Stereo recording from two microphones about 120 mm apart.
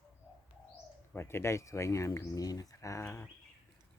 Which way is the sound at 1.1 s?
20° left (ahead or behind).